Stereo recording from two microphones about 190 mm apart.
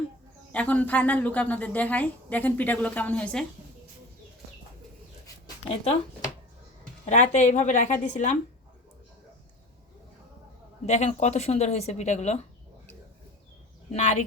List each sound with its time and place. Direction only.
0.5 s a woman's voice: 5° left (ahead or behind)
5.6 s speech: 30° left (ahead or behind)
10.8 s speech: 35° left (ahead or behind)
13.9 s speech: 40° left (ahead or behind)